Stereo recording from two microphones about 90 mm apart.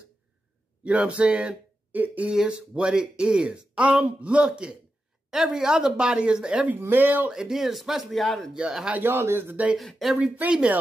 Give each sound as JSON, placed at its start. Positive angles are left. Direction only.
{"t": 0.8, "sound": "speech", "side_deg": -15}
{"t": 7.2, "sound": "speech", "side_deg": -5}
{"t": 8.5, "sound": "speech", "side_deg": -10}
{"t": 9.0, "sound": "speech", "side_deg": -25}
{"t": 9.8, "sound": "speech", "side_deg": 0}
{"t": 10.1, "sound": "speech", "side_deg": -15}